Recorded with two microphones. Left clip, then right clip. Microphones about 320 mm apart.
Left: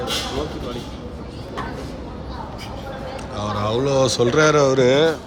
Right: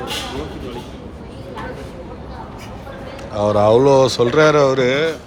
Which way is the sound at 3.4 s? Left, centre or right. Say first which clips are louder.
Right 10 dB; centre.